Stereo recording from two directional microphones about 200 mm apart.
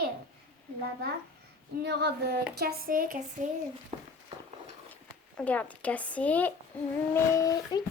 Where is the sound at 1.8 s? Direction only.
55° right (ahead or behind).